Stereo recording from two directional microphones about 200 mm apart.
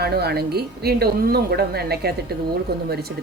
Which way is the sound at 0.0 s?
55° right (ahead or behind).